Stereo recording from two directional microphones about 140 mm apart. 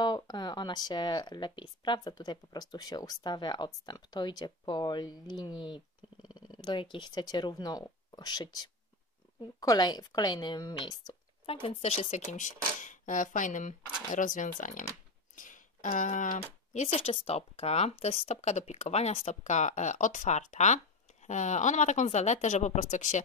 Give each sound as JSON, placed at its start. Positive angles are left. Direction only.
{"t": 0.0, "sound": "speech", "side_deg": 30}
{"t": 11.6, "sound": "speech", "side_deg": 50}
{"t": 15.3, "sound": "a sound", "side_deg": 70}
{"t": 16.3, "sound": "speech", "side_deg": 50}